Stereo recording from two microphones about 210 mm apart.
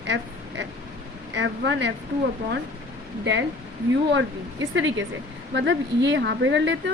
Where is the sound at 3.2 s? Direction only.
60° right (ahead or behind).